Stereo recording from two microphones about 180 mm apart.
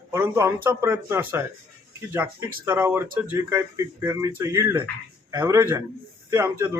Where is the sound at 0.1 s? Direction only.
15° right (ahead or behind).